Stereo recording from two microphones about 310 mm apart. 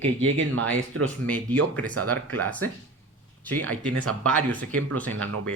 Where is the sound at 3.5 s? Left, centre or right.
Right.